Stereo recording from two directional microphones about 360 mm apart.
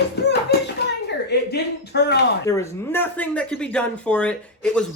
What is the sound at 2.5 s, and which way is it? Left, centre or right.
Speech, centre.